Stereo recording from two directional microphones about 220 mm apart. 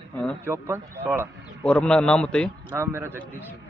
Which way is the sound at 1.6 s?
5° left (ahead or behind).